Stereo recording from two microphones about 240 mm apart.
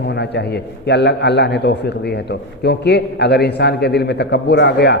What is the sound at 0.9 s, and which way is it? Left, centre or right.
A man's voice, left.